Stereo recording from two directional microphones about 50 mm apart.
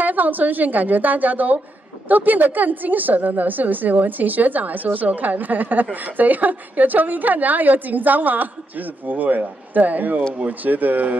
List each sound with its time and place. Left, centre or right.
0.0 s a woman's voice: right